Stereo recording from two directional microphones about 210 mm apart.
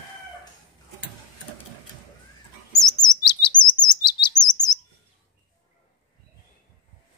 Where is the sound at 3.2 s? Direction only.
20° left (ahead or behind).